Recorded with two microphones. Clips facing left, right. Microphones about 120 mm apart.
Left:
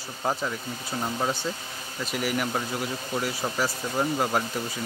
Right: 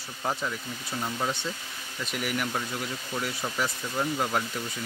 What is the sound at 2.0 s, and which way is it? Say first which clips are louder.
Speech: left 3 dB; centre (ahead or behind).